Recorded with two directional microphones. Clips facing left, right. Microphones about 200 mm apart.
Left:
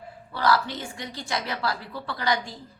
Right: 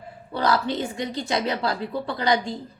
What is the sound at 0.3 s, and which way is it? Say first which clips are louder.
A woman's voice: right 2 dB; 20° right (ahead or behind).